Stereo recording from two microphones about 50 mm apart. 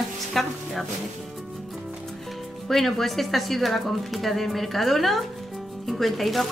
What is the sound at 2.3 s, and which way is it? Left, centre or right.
Speech, centre.